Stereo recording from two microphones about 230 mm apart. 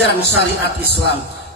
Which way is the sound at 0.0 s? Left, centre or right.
Left.